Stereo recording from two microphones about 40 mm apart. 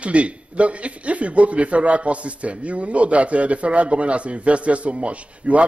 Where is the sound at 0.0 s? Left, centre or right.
Right.